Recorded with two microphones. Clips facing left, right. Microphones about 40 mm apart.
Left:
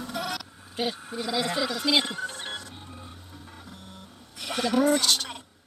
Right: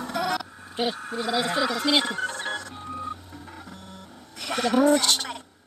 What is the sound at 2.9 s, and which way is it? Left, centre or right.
Vehicle, centre.